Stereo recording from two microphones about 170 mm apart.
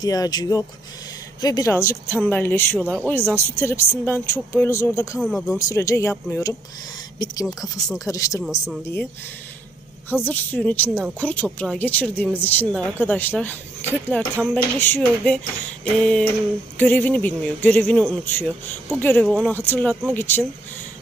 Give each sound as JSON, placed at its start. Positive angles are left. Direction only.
{"t": 0.0, "sound": "speech", "side_deg": 20}
{"t": 5.2, "sound": "speech", "side_deg": -5}
{"t": 5.5, "sound": "speech", "side_deg": 20}
{"t": 7.4, "sound": "speech", "side_deg": 0}
{"t": 7.9, "sound": "speech", "side_deg": 20}
{"t": 10.2, "sound": "speech", "side_deg": 10}